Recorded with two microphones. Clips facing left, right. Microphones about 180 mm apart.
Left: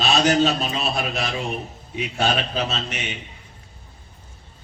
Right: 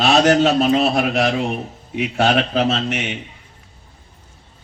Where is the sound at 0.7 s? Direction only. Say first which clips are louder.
Right 9 dB; 70° right (ahead or behind).